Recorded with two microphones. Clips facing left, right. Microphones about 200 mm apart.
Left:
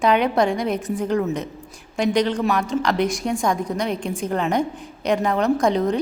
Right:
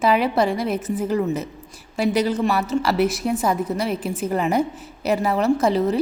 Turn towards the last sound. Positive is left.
turn(degrees=-5)  # may be behind; listen again after turning